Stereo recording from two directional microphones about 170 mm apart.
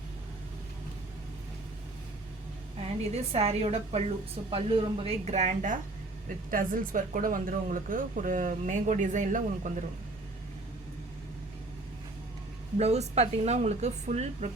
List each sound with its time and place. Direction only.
3.0 s speech: 35° right (ahead or behind)
6.5 s speech: 55° right (ahead or behind)
12.7 s speech: 40° right (ahead or behind)